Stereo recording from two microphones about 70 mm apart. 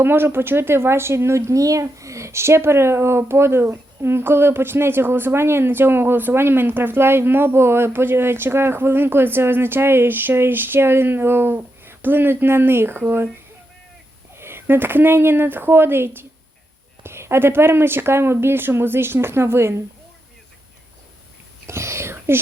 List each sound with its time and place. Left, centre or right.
0.0 s speech: right
14.3 s speech: right
21.7 s whispering: right